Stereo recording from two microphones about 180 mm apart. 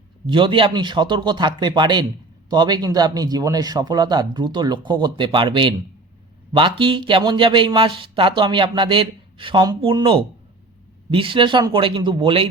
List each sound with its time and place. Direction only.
0.3 s speech: 25° right (ahead or behind)